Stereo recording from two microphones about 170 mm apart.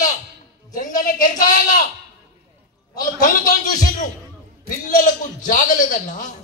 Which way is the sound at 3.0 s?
50° left (ahead or behind).